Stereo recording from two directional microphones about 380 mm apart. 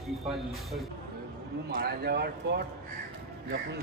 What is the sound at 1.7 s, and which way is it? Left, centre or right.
Speech, right.